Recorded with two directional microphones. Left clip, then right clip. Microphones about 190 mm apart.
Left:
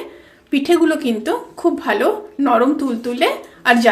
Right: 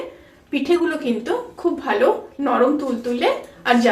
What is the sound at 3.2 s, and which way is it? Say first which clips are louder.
Speech: left 4 dB; 60° left (ahead or behind).